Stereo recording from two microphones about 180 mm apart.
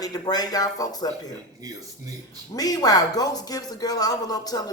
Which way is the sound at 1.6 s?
20° right (ahead or behind).